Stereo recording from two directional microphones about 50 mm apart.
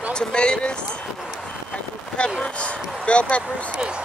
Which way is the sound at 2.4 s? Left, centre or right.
Left.